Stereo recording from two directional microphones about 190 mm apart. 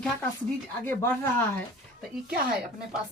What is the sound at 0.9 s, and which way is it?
Speech, 10° left (ahead or behind).